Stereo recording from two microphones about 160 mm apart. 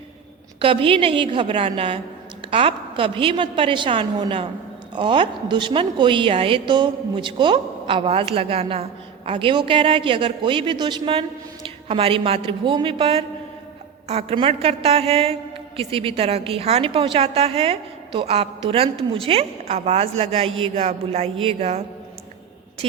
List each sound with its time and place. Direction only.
0.6 s a woman's voice: 35° right (ahead or behind)